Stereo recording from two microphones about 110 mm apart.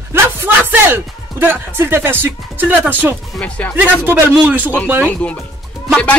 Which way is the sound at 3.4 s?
15° left (ahead or behind).